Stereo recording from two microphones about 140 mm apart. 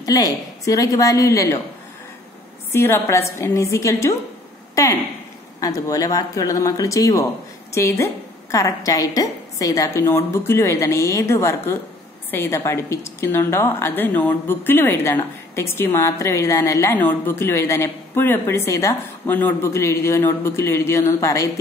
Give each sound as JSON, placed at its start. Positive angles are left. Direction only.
{"t": 0.0, "sound": "a woman's voice", "side_deg": 25}
{"t": 2.7, "sound": "a woman's voice", "side_deg": 15}